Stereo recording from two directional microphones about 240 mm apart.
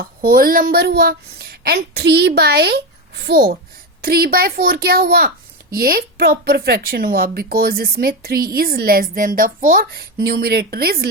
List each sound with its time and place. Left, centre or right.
0.2 s a woman's voice: right